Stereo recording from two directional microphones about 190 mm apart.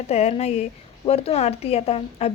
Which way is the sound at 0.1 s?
35° left (ahead or behind).